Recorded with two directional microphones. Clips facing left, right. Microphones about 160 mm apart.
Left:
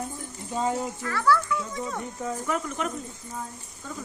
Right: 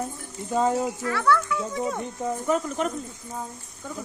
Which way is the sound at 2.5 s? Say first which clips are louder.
Right 5 dB; 30° right (ahead or behind).